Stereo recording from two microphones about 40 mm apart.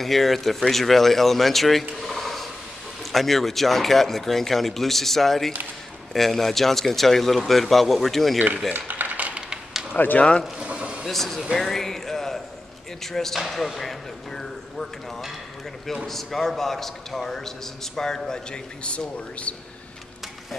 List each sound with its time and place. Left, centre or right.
0.0 s speech: centre
8.7 s a sound: right
9.9 s speech: left
10.6 s a sound: right
11.1 s a man's voice: centre
16.1 s a man's voice: centre; by 19.5 s left